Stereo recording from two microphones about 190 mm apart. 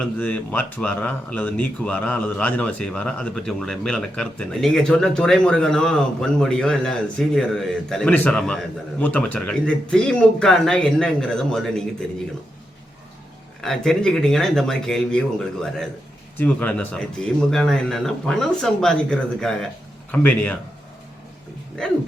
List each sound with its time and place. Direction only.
0.0 s speech: 5° left (ahead or behind)
13.6 s speech: centre (ahead or behind)